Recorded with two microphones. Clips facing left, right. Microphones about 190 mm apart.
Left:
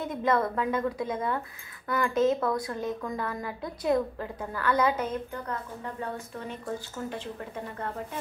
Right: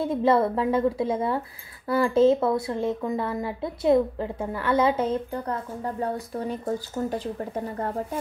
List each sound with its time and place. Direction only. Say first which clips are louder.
0.0 s speech: right 6 dB; 30° right (ahead or behind)